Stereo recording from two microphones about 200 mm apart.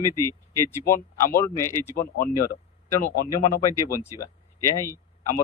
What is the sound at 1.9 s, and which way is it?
Speech, 50° left (ahead or behind).